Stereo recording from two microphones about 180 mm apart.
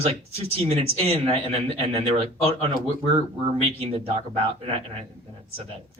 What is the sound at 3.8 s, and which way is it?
Speech, 35° right (ahead or behind).